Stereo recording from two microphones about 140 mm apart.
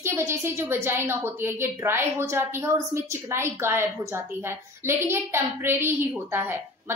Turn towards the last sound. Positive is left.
turn(degrees=-15)  # may be behind; listen again after turning